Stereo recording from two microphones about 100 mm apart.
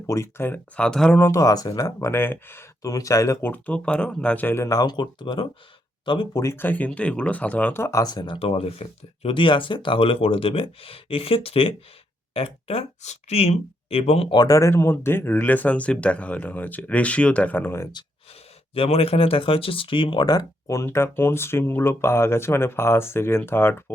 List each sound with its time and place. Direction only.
0.1 s speech: 25° left (ahead or behind)
0.8 s speech: 5° left (ahead or behind)
1.2 s speech: 35° left (ahead or behind)
2.0 s speech: 20° left (ahead or behind)
2.8 s speech: 35° left (ahead or behind)
3.4 s speech: 15° left (ahead or behind)
4.6 s speech: 40° left (ahead or behind)
6.3 s speech: 30° left (ahead or behind)
7.8 s speech: 30° left (ahead or behind)
8.0 s speech: 45° left (ahead or behind)
8.4 s speech: 70° left (ahead or behind)
14.3 s speech: 40° left (ahead or behind); by 17.8 s 20° left (ahead or behind)
18.7 s speech: 80° left; by 23.8 s 20° left (ahead or behind)